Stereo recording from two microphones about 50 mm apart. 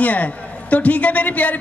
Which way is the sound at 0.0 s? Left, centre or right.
Left.